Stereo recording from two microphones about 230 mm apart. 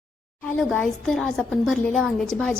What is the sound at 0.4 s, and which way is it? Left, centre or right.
Speech, centre.